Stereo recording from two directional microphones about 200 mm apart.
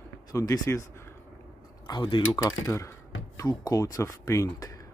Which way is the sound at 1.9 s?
25° left (ahead or behind).